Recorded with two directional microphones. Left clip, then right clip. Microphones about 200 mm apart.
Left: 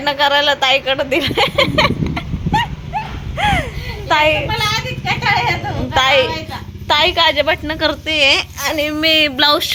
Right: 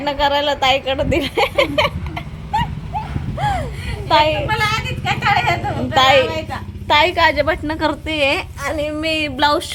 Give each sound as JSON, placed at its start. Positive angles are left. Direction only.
{"t": 0.0, "sound": "speech", "side_deg": -10}
{"t": 3.3, "sound": "a sound", "side_deg": 20}
{"t": 4.1, "sound": "speech", "side_deg": -5}
{"t": 8.6, "sound": "speech", "side_deg": 10}